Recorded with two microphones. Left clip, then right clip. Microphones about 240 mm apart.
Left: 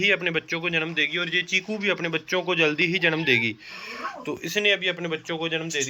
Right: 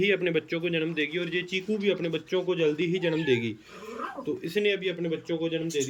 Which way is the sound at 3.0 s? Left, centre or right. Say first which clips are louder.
Left 4 dB; left.